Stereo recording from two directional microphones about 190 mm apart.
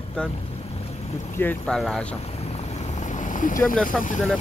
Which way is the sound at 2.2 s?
35° left (ahead or behind).